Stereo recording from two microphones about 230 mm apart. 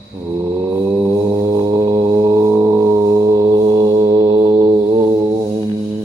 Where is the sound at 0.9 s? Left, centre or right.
Centre; by 4.7 s right.